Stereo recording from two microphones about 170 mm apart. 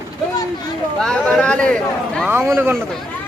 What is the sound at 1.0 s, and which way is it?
Speech, 5° left (ahead or behind).